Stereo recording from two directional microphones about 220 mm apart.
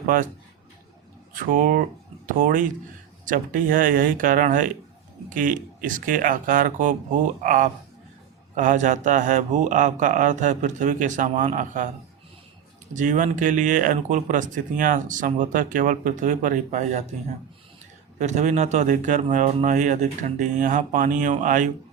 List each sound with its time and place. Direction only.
1.3 s speech: 35° right (ahead or behind)
12.9 s speech: 35° right (ahead or behind)
18.2 s speech: 30° right (ahead or behind)